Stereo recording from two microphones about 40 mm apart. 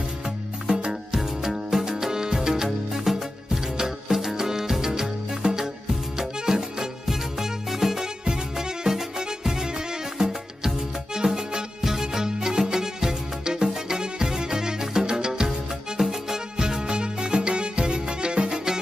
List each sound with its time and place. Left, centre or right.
0.7 s music: right
1.1 s music: centre